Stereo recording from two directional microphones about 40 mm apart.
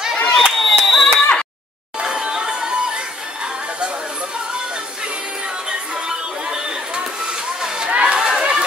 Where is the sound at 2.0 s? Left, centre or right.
Centre.